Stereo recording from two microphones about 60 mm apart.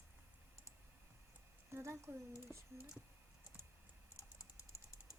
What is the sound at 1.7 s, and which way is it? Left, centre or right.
Speech, right.